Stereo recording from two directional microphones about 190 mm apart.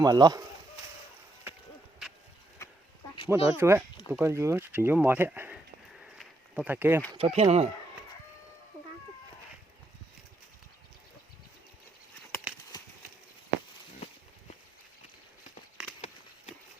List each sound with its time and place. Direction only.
0.0 s speech: 20° right (ahead or behind)
3.2 s speech: 15° right (ahead or behind)
6.0 s a sound: centre (ahead or behind)
6.7 s speech: 10° right (ahead or behind)
7.1 s speech: 30° right (ahead or behind)